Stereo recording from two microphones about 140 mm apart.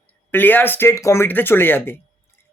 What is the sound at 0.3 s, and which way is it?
Speech, 15° left (ahead or behind).